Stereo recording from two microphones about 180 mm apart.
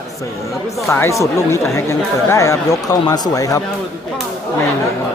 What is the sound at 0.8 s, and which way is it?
Speech, 15° left (ahead or behind).